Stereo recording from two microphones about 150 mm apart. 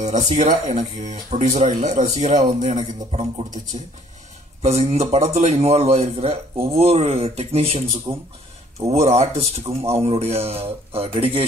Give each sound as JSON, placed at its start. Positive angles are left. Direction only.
{"t": 0.0, "sound": "a man's voice", "side_deg": -50}